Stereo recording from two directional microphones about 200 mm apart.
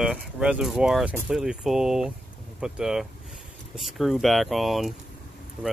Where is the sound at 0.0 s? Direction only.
Centre (ahead or behind).